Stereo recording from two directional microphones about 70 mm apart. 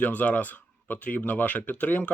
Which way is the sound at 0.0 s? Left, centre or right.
Left.